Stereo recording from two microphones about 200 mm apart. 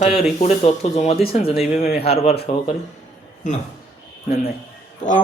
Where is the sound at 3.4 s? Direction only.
35° left (ahead or behind).